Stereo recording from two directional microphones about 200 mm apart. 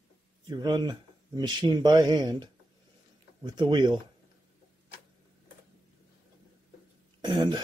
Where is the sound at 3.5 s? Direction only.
25° right (ahead or behind).